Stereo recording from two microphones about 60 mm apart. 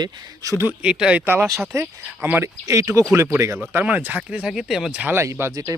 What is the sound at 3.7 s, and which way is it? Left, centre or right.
Speech, right.